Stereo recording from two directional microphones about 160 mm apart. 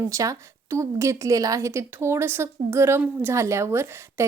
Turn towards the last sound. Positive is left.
turn(degrees=-15)  # may be behind; listen again after turning